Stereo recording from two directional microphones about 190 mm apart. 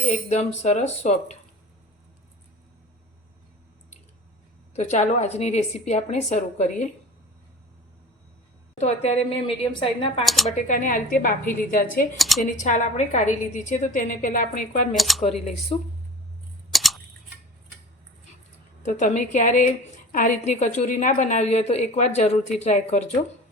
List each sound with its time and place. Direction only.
0.1 s a woman's voice: 35° left (ahead or behind)
4.7 s a woman's voice: 35° left (ahead or behind)
8.8 s a woman's voice: 35° left (ahead or behind)
10.2 s speech: centre (ahead or behind)
10.7 s a woman's voice: 45° left (ahead or behind)
12.1 s speech: centre (ahead or behind)
12.5 s a woman's voice: 40° left (ahead or behind)
14.9 s speech: centre (ahead or behind)
15.7 s a woman's voice: 30° left (ahead or behind)
16.7 s camera: centre (ahead or behind)
18.8 s a woman's voice: 40° left (ahead or behind)